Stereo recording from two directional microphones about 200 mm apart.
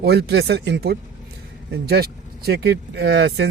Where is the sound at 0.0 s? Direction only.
55° right (ahead or behind).